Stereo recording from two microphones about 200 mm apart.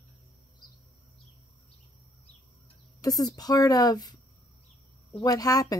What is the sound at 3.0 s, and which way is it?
Speech, 20° left (ahead or behind).